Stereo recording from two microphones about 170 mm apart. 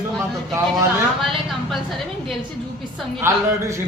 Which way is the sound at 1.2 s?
Centre (ahead or behind).